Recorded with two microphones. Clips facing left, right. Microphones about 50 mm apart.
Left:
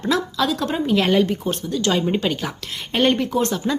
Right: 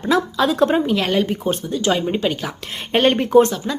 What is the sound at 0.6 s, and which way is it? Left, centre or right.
Speech, right.